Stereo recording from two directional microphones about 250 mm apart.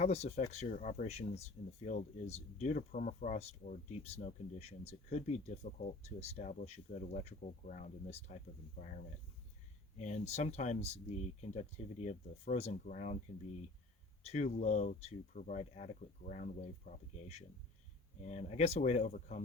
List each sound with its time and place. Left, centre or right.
0.0 s speech: left
14.3 s speech: left